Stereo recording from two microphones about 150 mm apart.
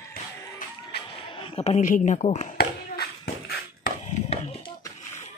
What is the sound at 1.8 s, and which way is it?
Speech, 60° left (ahead or behind).